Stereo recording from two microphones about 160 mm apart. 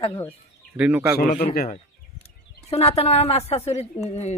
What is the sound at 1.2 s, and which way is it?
Speech, 65° left (ahead or behind).